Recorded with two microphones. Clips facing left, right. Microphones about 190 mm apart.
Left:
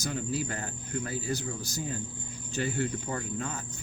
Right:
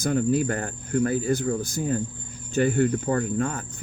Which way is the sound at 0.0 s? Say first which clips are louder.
Right 10 dB; 55° right (ahead or behind).